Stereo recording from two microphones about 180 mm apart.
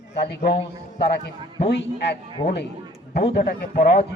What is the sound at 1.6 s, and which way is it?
Speech, 70° left (ahead or behind).